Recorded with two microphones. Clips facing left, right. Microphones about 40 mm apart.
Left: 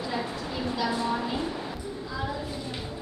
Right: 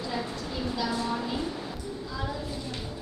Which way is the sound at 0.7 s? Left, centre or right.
Centre.